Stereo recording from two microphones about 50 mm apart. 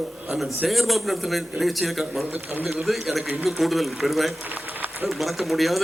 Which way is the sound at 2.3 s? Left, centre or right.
Right.